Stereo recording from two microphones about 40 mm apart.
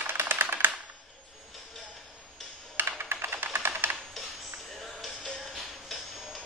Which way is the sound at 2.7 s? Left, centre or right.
Right.